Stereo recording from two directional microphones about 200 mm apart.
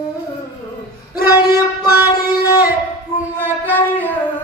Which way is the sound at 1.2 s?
20° left (ahead or behind).